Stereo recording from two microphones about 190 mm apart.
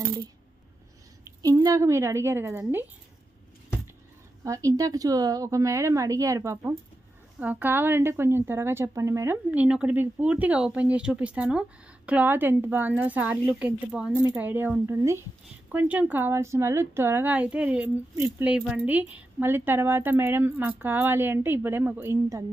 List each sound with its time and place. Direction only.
1.2 s a woman's voice: 20° right (ahead or behind)
4.5 s a woman's voice: 15° right (ahead or behind)